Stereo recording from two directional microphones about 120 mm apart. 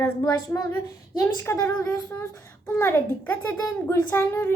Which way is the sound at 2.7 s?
15° left (ahead or behind).